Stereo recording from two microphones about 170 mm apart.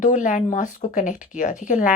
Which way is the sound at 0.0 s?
50° left (ahead or behind).